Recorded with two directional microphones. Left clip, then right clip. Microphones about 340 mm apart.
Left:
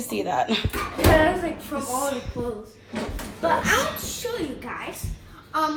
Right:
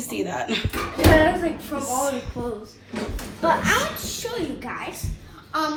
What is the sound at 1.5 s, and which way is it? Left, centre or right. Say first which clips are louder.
Speech: right 1 dB; centre.